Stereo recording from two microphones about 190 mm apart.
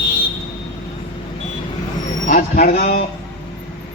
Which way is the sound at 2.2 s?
45° left (ahead or behind).